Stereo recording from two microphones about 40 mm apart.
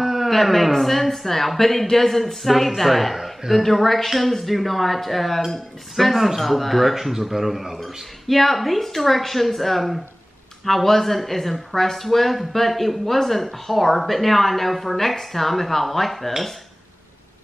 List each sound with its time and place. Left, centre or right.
0.0 s a sound: centre
0.3 s speech: centre
7.8 s speech: centre